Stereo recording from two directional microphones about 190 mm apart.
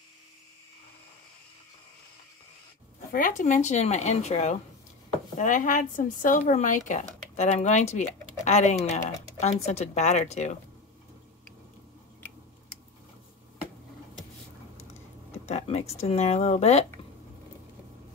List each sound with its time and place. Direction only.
3.1 s speech: 45° left (ahead or behind)
15.4 s a sound: 35° left (ahead or behind)
16.0 s speech: 35° left (ahead or behind)